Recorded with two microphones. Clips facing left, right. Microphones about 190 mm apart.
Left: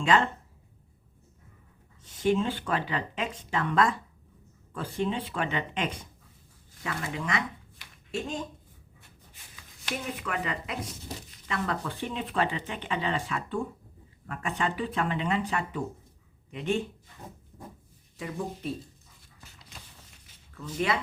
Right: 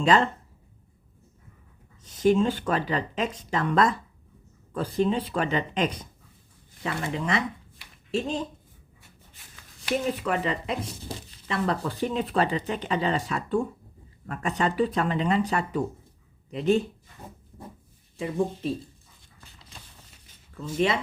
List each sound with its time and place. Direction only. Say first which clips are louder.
0.0 s speech: right 3 dB; 35° right (ahead or behind)
2.0 s speech: right 5 dB; 40° right (ahead or behind)
10.2 s speech: right 6 dB; 30° right (ahead or behind)
18.2 s speech: right 7 dB; 25° right (ahead or behind)
20.6 s speech: right 4 dB; 25° right (ahead or behind)